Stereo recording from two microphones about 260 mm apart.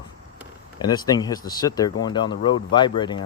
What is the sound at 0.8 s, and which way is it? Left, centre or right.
Speech, centre.